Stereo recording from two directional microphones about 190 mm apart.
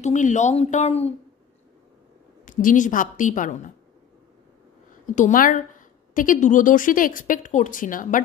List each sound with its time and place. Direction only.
0.0 s speech: 40° left (ahead or behind)
2.4 s a woman's voice: 45° left (ahead or behind)
5.0 s a woman's voice: 45° left (ahead or behind)